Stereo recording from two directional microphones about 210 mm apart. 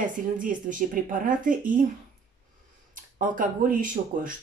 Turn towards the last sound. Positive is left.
turn(degrees=-40)  # may be behind; listen again after turning